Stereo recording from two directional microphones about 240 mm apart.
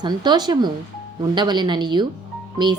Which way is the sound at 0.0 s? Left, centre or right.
Centre.